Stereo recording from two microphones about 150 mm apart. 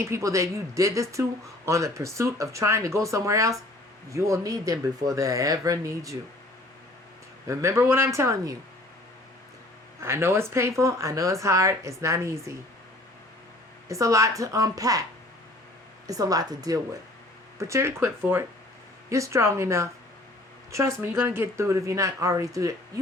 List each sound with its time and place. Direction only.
0.0 s speech: 20° right (ahead or behind)
7.4 s speech: 20° right (ahead or behind)
10.0 s speech: 15° right (ahead or behind)
13.8 s speech: 20° right (ahead or behind)
16.0 s speech: 25° right (ahead or behind)